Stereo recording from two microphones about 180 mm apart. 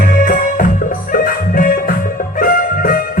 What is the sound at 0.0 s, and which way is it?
Music, 50° left (ahead or behind).